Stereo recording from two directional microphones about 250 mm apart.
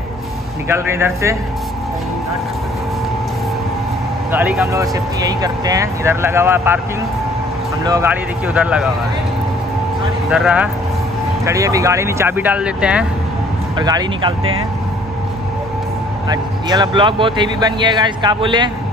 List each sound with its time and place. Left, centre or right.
0.7 s speech: centre
4.3 s speech: centre
7.8 s speech: centre
10.3 s speech: centre
13.7 s speech: centre
16.3 s speech: centre